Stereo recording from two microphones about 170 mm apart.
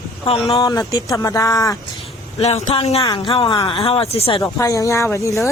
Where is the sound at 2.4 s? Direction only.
40° left (ahead or behind).